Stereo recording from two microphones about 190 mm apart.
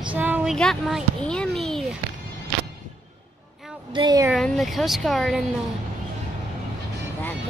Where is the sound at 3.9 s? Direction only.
20° right (ahead or behind).